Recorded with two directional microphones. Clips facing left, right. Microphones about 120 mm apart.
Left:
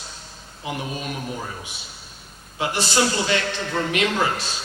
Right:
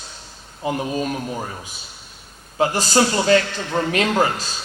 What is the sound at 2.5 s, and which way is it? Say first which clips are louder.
A man's voice: right 5 dB; 40° right (ahead or behind).